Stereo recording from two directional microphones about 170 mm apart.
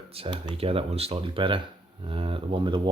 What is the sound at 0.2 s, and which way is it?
Speech, 30° right (ahead or behind).